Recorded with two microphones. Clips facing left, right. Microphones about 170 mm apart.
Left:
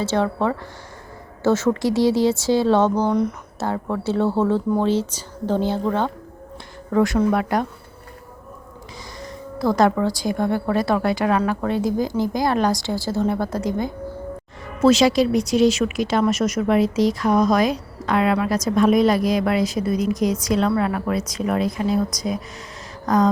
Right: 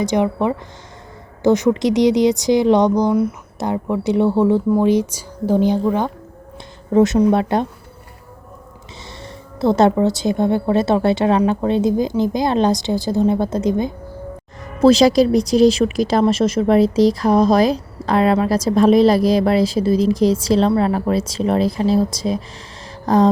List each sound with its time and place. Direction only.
0.0 s speech: 15° right (ahead or behind)
9.2 s speech: 25° right (ahead or behind)
14.8 s speech: 35° right (ahead or behind)